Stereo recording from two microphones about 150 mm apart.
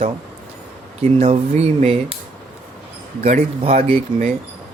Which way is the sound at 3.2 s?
50° right (ahead or behind).